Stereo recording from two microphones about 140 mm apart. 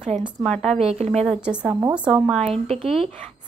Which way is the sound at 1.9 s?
10° right (ahead or behind).